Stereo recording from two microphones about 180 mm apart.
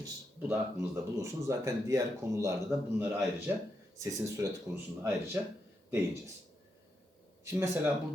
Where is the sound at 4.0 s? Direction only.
15° right (ahead or behind).